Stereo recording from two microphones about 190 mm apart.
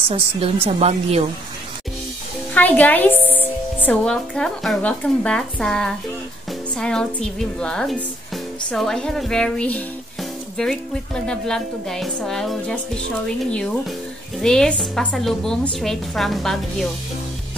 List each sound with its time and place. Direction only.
0.1 s a woman's voice: 30° right (ahead or behind)
2.5 s a woman's voice: 10° left (ahead or behind)
14.4 s a woman's voice: 5° left (ahead or behind)